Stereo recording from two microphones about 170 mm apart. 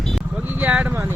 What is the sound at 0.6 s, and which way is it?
Speech, 5° right (ahead or behind).